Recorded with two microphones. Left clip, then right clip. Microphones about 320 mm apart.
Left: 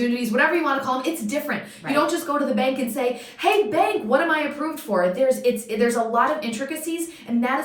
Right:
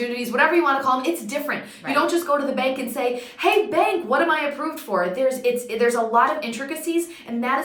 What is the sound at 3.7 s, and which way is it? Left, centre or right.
A woman's voice, centre.